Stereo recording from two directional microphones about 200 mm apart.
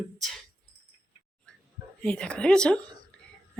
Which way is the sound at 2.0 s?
5° left (ahead or behind).